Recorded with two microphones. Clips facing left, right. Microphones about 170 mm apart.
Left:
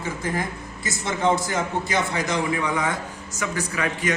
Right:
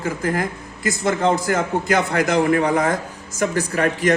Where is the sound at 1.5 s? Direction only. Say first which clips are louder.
Right 5 dB; 55° right (ahead or behind).